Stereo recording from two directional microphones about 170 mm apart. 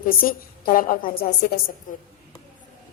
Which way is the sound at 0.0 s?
55° left (ahead or behind).